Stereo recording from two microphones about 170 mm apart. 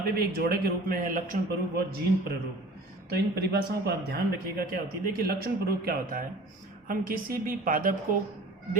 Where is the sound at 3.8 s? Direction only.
70° right (ahead or behind).